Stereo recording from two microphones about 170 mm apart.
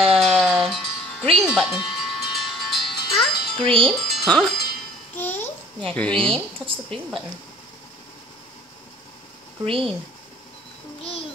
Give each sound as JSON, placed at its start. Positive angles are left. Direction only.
{"t": 0.0, "sound": "music", "side_deg": 0}
{"t": 5.1, "sound": "babbling", "side_deg": 10}
{"t": 5.9, "sound": "a woman's voice", "side_deg": 5}
{"t": 11.0, "sound": "a sound", "side_deg": 35}